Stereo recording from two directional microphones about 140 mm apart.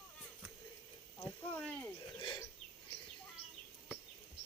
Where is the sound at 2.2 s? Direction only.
30° left (ahead or behind).